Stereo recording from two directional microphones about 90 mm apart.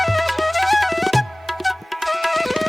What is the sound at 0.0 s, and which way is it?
Music, centre (ahead or behind).